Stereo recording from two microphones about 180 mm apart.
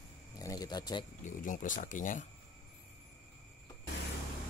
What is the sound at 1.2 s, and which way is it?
Speech, 45° left (ahead or behind).